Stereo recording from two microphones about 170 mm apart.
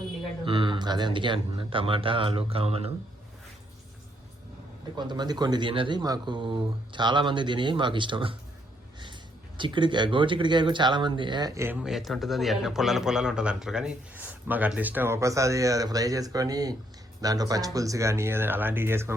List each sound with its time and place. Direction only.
0.4 s speech: 30° right (ahead or behind)
4.9 s speech: 25° right (ahead or behind)
9.6 s speech: 30° right (ahead or behind)
11.8 s a man's voice: centre (ahead or behind)